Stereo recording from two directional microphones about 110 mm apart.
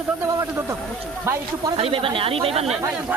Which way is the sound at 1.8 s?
55° right (ahead or behind).